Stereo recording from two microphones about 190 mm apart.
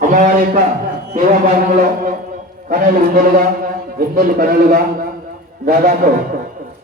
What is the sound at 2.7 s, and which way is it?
A man's voice, 45° right (ahead or behind).